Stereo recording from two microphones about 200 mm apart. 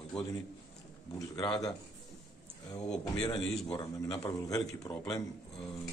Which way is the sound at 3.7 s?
15° left (ahead or behind).